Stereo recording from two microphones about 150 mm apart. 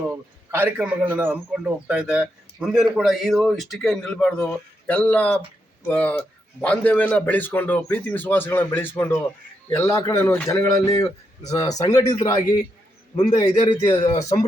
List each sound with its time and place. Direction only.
0.0 s a man's voice: 15° right (ahead or behind); by 14.4 s 25° left (ahead or behind)